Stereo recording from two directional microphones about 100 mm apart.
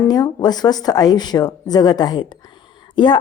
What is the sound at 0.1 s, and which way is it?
A woman's voice, 40° left (ahead or behind).